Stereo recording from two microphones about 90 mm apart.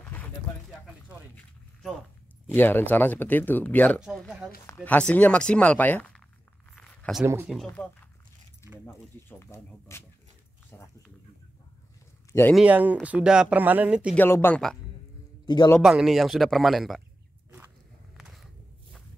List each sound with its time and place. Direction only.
0.0 s a sound: 20° left (ahead or behind)
2.5 s speech: 20° left (ahead or behind)
6.8 s zipper: 15° left (ahead or behind)
7.6 s speech: 15° left (ahead or behind)
8.8 s speech: 25° left (ahead or behind)
12.6 s speech: 15° right (ahead or behind)
14.1 s speech: 25° left (ahead or behind)
15.4 s a man's voice: 55° left (ahead or behind)
15.8 s speech: 5° right (ahead or behind)
18.1 s a sound: 5° right (ahead or behind)